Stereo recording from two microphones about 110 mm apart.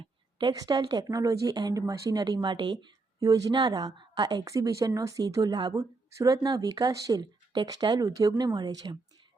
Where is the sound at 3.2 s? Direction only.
35° right (ahead or behind).